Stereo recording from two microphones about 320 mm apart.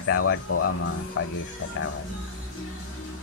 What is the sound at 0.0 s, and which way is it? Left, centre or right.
Speech, left.